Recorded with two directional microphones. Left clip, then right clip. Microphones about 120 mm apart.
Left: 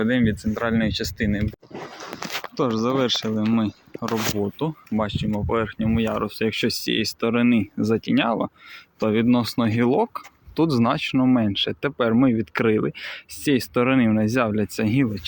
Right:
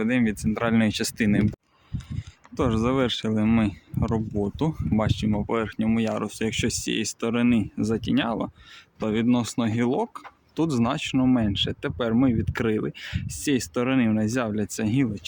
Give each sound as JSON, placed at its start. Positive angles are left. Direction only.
{"t": 0.0, "sound": "speech", "side_deg": -15}
{"t": 0.5, "sound": "speech", "side_deg": -35}
{"t": 0.9, "sound": "speech", "side_deg": -55}
{"t": 2.8, "sound": "speech", "side_deg": -5}
{"t": 3.3, "sound": "speech", "side_deg": -20}
{"t": 3.6, "sound": "speech", "side_deg": -10}
{"t": 4.6, "sound": "speech", "side_deg": -25}